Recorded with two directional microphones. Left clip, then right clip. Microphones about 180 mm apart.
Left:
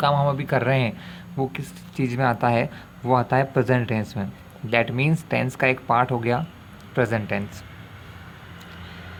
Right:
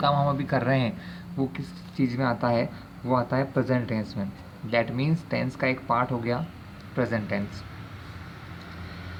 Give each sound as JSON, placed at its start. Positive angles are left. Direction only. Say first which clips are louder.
{"t": 0.0, "sound": "speech", "louder": "left 3 dB", "side_deg": 40}